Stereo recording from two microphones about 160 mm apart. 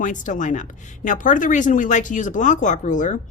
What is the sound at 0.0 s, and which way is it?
A woman's voice, 55° left (ahead or behind).